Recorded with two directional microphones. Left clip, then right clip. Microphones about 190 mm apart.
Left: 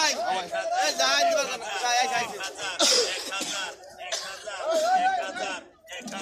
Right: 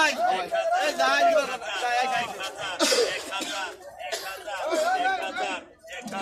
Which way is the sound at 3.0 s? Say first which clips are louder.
Right 1 dB; 40° right (ahead or behind).